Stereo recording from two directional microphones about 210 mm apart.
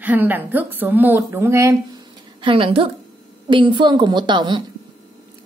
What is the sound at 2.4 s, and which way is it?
A woman's voice, 25° right (ahead or behind).